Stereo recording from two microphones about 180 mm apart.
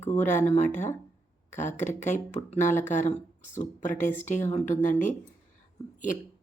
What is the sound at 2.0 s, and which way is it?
Speech, 40° left (ahead or behind).